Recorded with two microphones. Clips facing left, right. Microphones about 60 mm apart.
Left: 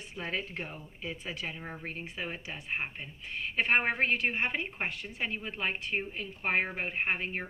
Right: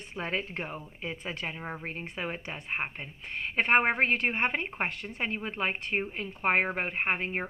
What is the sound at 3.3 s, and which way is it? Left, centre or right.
A woman's voice, right.